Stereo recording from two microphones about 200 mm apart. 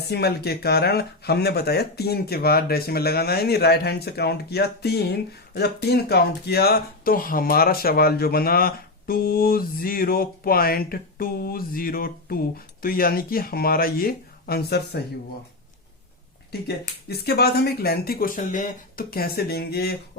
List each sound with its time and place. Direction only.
0.1 s speech: 55° left (ahead or behind)
16.5 s speech: 50° left (ahead or behind)